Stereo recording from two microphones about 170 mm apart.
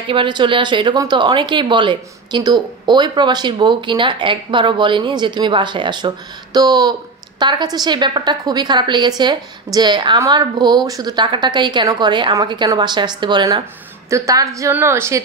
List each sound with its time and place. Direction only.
0.1 s a woman's voice: 30° right (ahead or behind)